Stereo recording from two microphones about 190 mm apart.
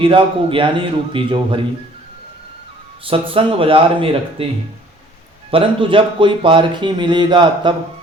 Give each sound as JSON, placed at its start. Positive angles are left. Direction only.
{"t": 0.0, "sound": "speech", "side_deg": -30}
{"t": 3.0, "sound": "speech", "side_deg": -30}
{"t": 5.5, "sound": "speech", "side_deg": -30}